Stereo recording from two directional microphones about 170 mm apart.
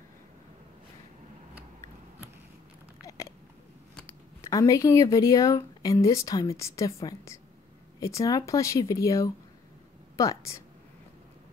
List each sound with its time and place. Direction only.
3.0 s hiccup: 20° left (ahead or behind)
4.4 s speech: 20° left (ahead or behind)